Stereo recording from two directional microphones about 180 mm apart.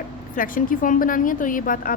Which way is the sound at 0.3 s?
50° left (ahead or behind).